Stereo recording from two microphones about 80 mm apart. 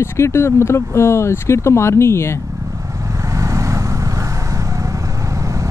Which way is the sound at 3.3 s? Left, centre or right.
Right.